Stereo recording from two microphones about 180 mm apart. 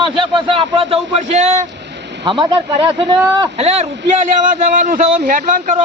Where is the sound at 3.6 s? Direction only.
35° right (ahead or behind).